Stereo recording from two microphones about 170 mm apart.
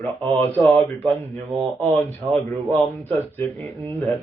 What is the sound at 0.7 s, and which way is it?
Speech, 10° left (ahead or behind).